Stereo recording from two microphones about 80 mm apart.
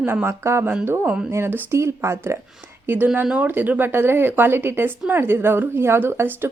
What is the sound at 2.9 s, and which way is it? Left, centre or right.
Speech, right.